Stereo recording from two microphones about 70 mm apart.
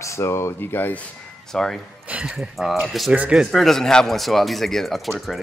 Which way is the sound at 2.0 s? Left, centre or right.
Centre.